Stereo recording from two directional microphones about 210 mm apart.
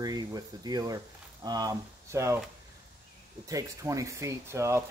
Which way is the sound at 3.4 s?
15° right (ahead or behind).